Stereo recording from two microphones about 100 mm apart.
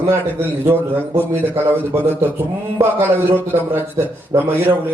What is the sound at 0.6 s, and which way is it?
A man's voice, 20° right (ahead or behind).